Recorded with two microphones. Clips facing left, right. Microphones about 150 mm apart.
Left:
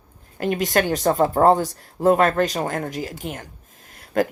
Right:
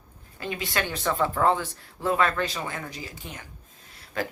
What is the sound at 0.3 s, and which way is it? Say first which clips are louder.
Speech: left 10 dB; 65° left (ahead or behind).